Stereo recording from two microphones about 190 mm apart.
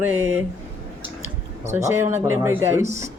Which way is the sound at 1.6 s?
15° right (ahead or behind).